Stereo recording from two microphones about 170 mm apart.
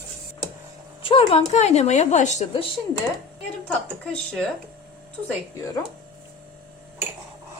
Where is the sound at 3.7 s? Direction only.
5° left (ahead or behind).